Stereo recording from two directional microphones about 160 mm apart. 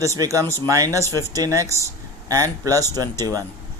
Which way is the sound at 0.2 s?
20° right (ahead or behind).